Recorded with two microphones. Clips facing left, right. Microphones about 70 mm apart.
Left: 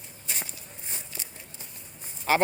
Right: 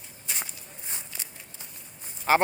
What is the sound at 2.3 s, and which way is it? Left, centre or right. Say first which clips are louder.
Speech: right 2 dB; right.